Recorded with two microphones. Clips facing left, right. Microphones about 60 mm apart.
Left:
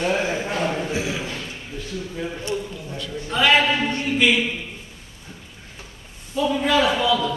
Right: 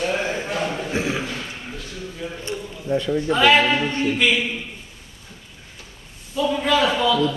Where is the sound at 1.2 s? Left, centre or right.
Centre.